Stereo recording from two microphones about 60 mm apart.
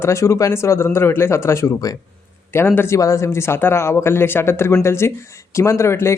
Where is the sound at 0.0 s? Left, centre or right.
Left.